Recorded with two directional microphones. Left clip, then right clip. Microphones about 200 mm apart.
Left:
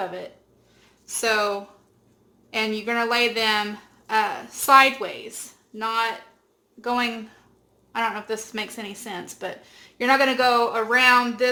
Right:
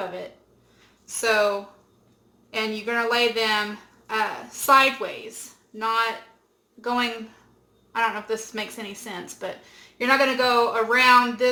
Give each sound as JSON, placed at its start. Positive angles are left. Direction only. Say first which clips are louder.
{"t": 1.2, "sound": "speech", "louder": "right 1 dB", "side_deg": 35}